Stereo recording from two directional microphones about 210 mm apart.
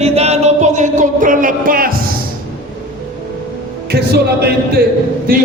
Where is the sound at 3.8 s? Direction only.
50° right (ahead or behind).